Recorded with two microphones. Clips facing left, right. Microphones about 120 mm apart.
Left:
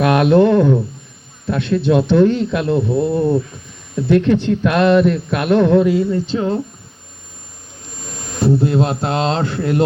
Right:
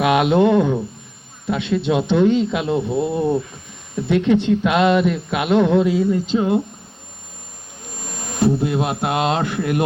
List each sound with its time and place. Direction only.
0.0 s speech: 15° right (ahead or behind)
8.4 s speech: 20° right (ahead or behind)